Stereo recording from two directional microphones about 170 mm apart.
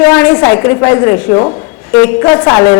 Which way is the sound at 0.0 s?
15° left (ahead or behind).